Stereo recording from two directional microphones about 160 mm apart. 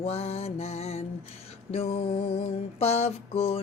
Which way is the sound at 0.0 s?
40° left (ahead or behind).